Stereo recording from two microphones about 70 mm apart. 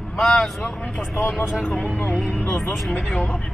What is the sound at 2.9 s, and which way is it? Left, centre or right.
Speech, centre.